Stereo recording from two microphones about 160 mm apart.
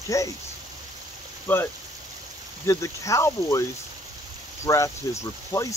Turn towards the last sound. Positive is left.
turn(degrees=20)  # may be behind; listen again after turning